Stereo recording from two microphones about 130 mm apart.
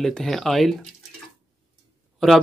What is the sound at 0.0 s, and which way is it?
Speech, 5° left (ahead or behind).